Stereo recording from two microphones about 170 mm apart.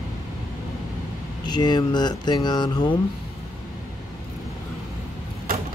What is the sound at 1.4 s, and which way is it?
Speech, 25° left (ahead or behind).